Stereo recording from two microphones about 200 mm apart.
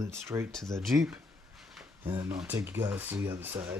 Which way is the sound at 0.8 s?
Centre (ahead or behind).